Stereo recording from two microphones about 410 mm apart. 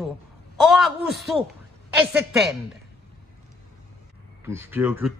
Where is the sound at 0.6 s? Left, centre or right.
Centre.